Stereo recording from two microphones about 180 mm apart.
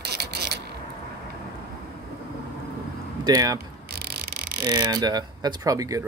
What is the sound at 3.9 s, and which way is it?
Clock, 65° right (ahead or behind).